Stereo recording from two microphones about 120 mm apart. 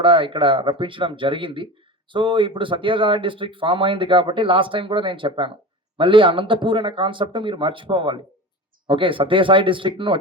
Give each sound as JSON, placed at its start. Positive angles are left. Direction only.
{"t": 0.0, "sound": "speech", "side_deg": -45}